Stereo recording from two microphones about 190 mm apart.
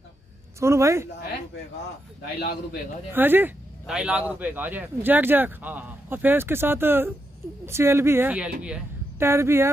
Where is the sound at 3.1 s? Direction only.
10° right (ahead or behind).